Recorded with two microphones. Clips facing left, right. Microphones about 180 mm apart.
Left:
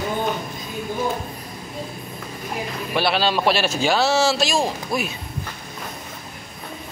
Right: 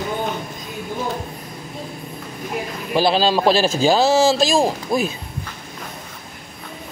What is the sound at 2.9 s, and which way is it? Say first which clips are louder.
A man's voice: right 4 dB; 35° right (ahead or behind).